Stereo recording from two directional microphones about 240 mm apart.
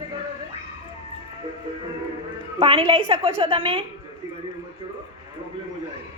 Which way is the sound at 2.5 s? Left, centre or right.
Right.